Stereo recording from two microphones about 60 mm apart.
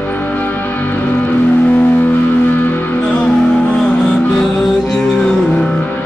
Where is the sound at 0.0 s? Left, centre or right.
Left.